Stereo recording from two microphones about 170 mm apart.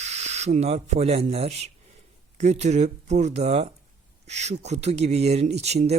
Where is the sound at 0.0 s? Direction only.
40° right (ahead or behind).